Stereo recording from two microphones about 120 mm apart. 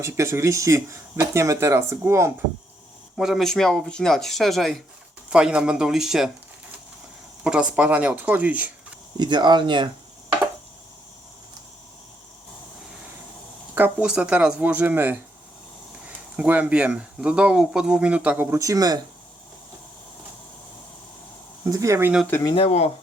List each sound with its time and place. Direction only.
0.0 s speech: 25° right (ahead or behind)
3.2 s speech: centre (ahead or behind)
7.4 s speech: 10° right (ahead or behind)
9.1 s speech: 40° right (ahead or behind)
13.7 s speech: 10° right (ahead or behind)
16.4 s speech: 10° right (ahead or behind)
18.5 s speech: 25° right (ahead or behind)
21.6 s speech: 25° right (ahead or behind)
22.4 s speech: 50° left (ahead or behind)